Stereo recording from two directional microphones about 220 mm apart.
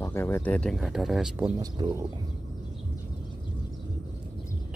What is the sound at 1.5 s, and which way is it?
Speech, 20° right (ahead or behind).